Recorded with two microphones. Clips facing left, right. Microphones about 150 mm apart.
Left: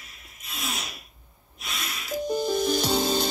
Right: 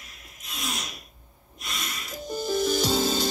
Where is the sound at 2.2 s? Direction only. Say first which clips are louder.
Left 1 dB; 55° left (ahead or behind).